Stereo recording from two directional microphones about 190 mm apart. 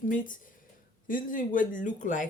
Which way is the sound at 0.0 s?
45° left (ahead or behind).